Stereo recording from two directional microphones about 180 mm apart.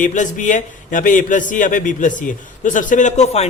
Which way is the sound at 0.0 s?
45° left (ahead or behind).